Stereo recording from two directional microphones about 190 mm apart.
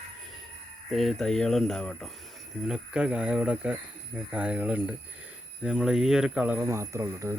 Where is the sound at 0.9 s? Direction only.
Centre (ahead or behind).